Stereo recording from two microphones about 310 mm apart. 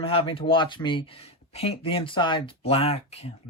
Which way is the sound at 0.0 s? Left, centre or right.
Centre.